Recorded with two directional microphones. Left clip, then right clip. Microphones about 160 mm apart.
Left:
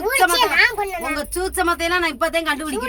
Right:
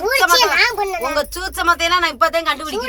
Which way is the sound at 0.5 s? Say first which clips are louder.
Right 1 dB; 5° right (ahead or behind).